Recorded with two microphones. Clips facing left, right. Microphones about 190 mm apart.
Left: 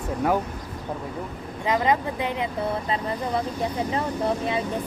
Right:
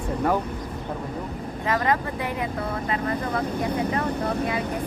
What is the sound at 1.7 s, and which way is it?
Speech, 20° left (ahead or behind).